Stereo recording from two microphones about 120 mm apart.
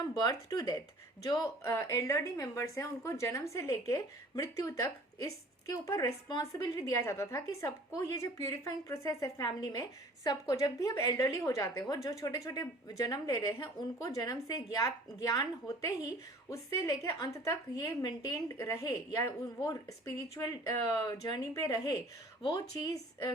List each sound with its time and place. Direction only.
0.2 s a woman's voice: 30° left (ahead or behind)
9.5 s a woman's voice: 35° left (ahead or behind)